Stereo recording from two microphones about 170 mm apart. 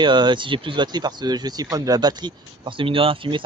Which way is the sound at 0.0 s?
25° right (ahead or behind).